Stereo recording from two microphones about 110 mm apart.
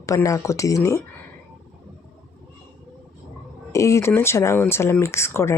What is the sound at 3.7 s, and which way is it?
Speech, 25° left (ahead or behind).